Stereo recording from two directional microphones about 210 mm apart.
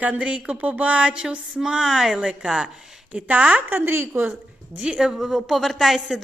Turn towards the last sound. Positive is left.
turn(degrees=0)  # may be behind; listen again after turning